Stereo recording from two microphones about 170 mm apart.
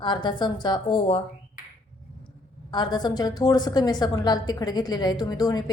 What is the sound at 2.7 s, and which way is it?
A woman's voice, 25° left (ahead or behind).